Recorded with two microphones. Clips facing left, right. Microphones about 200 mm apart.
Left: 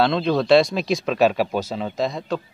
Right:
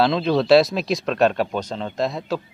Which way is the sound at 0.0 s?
Centre (ahead or behind).